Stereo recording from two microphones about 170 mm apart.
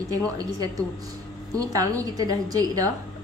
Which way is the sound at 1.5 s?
20° right (ahead or behind).